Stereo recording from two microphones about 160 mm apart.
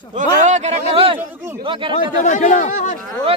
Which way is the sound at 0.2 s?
50° right (ahead or behind).